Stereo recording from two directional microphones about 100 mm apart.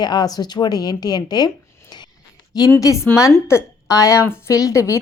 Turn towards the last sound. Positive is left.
turn(degrees=30)  # may be behind; listen again after turning